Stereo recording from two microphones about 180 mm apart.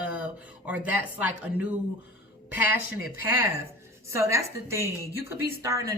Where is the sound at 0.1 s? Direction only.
5° right (ahead or behind).